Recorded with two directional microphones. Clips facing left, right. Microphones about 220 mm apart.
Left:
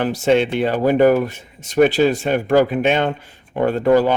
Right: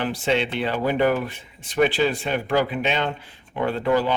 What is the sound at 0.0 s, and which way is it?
Speech, 45° left (ahead or behind).